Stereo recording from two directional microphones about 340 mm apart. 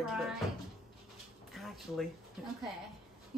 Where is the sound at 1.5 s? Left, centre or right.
Centre.